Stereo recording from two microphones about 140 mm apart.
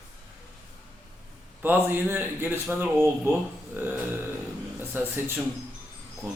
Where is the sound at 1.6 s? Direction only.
15° right (ahead or behind).